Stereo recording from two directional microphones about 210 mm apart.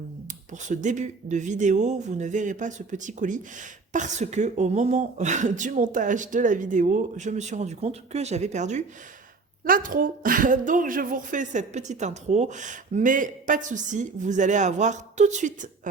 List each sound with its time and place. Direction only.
0.5 s speech: 35° right (ahead or behind)